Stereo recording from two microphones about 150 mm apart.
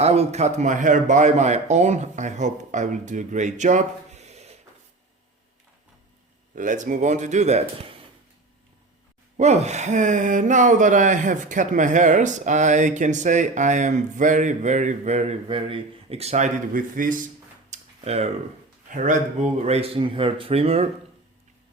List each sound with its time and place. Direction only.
0.0 s speech: 45° right (ahead or behind)
6.6 s speech: 60° right (ahead or behind)
9.4 s speech: 50° right (ahead or behind); by 17.2 s 65° right (ahead or behind)
17.7 s tick-tock: 45° right (ahead or behind)
18.9 s speech: 55° right (ahead or behind)